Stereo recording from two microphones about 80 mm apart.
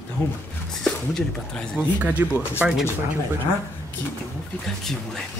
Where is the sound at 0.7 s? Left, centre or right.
Centre.